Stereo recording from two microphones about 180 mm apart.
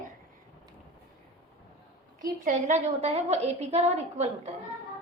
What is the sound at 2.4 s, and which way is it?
A woman's voice, 40° right (ahead or behind).